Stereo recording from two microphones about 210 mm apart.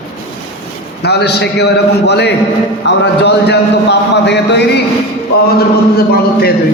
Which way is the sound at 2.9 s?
55° left (ahead or behind).